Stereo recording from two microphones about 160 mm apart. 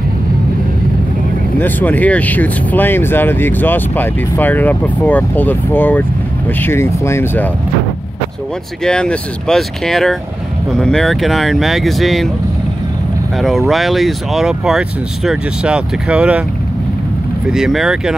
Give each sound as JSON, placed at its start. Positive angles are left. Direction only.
{"t": 1.6, "sound": "speech", "side_deg": 10}
{"t": 8.8, "sound": "speech", "side_deg": 5}
{"t": 13.7, "sound": "speech", "side_deg": 0}
{"t": 17.5, "sound": "speech", "side_deg": 0}